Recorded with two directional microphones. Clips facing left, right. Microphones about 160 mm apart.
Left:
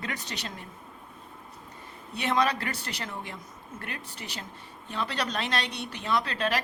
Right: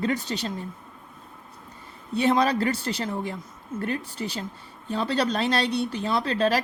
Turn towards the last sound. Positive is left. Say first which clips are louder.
# right 5 dB
turn(degrees=-35)  # may be behind; listen again after turning